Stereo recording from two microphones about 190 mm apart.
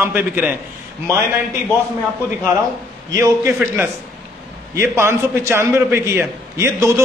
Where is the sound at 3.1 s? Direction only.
15° right (ahead or behind).